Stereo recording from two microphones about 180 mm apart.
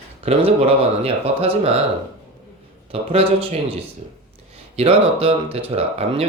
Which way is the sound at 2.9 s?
35° right (ahead or behind).